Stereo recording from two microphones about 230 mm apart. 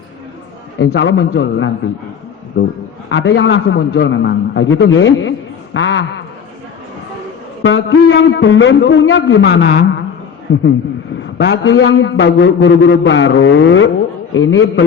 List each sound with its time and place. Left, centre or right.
0.8 s a man's voice: left
7.6 s a man's voice: left